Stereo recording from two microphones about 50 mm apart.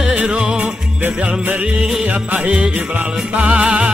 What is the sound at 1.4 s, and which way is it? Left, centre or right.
Music, right.